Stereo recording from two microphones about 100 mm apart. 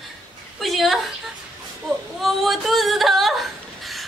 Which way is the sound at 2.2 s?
Centre (ahead or behind).